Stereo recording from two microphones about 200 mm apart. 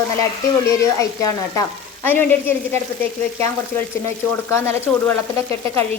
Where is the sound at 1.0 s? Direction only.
15° left (ahead or behind).